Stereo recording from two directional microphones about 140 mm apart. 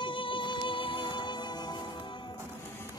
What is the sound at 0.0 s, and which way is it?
Music, 35° left (ahead or behind).